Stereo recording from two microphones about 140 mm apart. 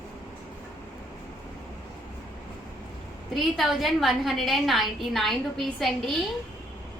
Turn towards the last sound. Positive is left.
turn(degrees=0)  # may be behind; listen again after turning